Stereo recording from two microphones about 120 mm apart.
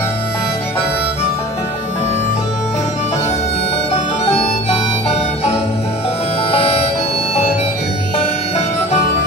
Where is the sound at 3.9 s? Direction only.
60° left (ahead or behind).